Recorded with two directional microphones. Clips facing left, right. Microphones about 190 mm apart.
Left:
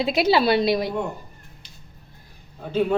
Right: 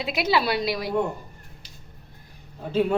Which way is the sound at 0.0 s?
30° left (ahead or behind).